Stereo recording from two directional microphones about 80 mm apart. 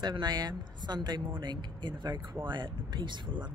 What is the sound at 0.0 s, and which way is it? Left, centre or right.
Speech, right.